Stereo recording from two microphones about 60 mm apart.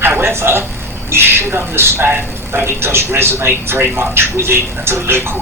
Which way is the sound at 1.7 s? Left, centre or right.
Right.